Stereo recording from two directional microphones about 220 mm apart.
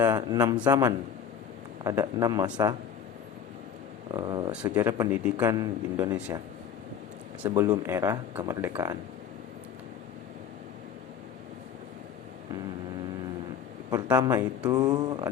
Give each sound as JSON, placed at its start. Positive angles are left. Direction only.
{"t": 0.0, "sound": "speech", "side_deg": -15}
{"t": 4.1, "sound": "speech", "side_deg": -20}
{"t": 7.4, "sound": "speech", "side_deg": -10}
{"t": 13.9, "sound": "speech", "side_deg": -10}